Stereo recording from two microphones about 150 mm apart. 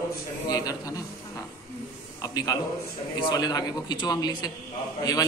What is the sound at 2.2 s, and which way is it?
A man's voice, 25° left (ahead or behind).